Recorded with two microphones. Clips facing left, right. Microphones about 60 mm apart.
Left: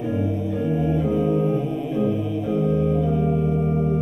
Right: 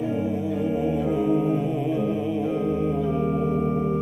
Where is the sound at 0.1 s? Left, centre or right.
Centre.